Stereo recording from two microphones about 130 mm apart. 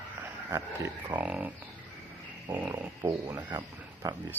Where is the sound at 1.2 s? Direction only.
5° right (ahead or behind).